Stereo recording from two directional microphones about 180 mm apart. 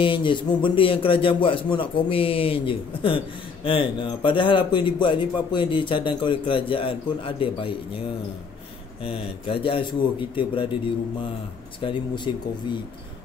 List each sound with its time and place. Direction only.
0.0 s a man's voice: 25° left (ahead or behind)
9.0 s a man's voice: 30° left (ahead or behind)
12.3 s a man's voice: 25° left (ahead or behind)